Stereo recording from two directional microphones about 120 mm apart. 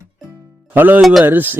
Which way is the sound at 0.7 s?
15° right (ahead or behind).